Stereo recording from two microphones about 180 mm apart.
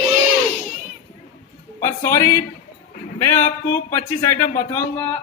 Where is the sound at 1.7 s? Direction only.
15° left (ahead or behind).